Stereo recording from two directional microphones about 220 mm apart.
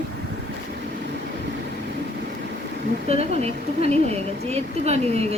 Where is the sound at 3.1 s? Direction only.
30° right (ahead or behind).